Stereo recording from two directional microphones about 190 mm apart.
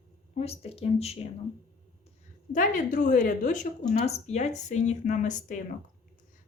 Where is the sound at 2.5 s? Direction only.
45° left (ahead or behind).